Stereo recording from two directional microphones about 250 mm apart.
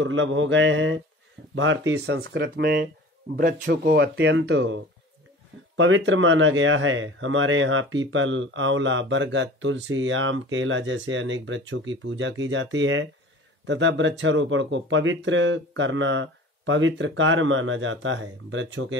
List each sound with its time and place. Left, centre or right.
0.0 s a man's voice: right